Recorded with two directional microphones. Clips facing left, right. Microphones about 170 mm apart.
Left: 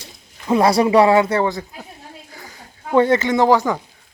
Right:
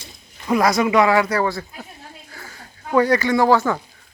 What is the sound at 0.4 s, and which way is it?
Speech, 30° left (ahead or behind).